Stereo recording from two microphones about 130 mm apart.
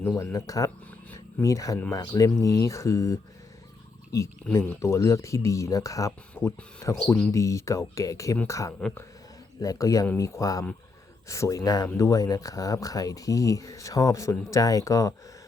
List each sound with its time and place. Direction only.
0.3 s speech: 25° left (ahead or behind)
4.5 s speech: 20° left (ahead or behind)